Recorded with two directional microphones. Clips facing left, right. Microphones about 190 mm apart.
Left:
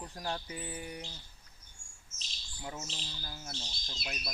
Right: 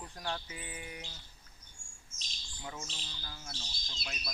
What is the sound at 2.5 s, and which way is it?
Speech, 10° left (ahead or behind).